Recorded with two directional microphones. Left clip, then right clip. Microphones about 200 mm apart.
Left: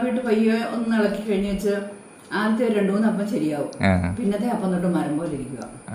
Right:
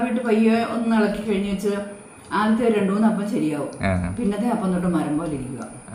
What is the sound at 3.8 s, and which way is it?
Speech, 15° left (ahead or behind).